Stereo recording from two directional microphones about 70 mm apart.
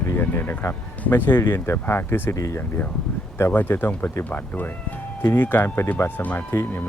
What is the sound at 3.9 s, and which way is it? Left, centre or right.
Speech, left.